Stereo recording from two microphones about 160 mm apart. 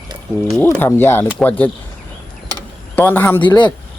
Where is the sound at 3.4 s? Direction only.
30° left (ahead or behind).